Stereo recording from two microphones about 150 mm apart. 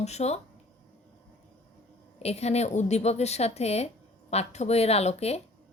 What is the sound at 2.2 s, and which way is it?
A woman's voice, 45° left (ahead or behind).